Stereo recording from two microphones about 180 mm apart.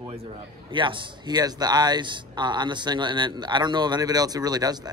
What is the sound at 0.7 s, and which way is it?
Speech, 25° right (ahead or behind).